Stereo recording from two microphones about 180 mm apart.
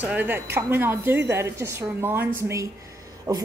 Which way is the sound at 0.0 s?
10° right (ahead or behind).